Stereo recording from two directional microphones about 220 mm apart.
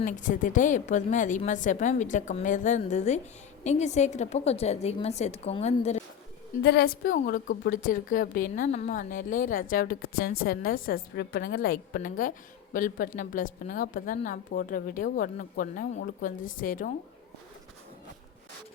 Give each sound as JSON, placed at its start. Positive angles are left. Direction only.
{"t": 0.0, "sound": "a woman's voice", "side_deg": 35}
{"t": 6.6, "sound": "a woman's voice", "side_deg": 50}